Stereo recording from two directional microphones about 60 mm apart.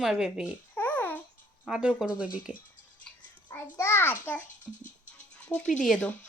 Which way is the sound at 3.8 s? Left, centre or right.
Left.